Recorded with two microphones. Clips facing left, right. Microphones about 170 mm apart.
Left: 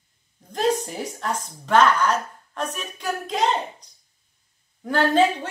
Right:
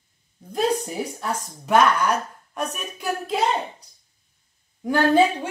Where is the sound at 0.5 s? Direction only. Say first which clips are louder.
Even; 5° right (ahead or behind).